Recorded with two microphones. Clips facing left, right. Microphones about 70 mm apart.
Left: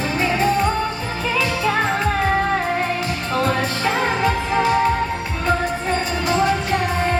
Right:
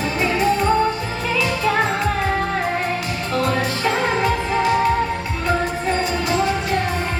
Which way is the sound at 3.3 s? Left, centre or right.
Left.